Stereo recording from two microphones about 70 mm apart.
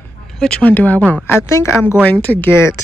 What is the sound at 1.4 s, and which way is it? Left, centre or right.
Speech, left.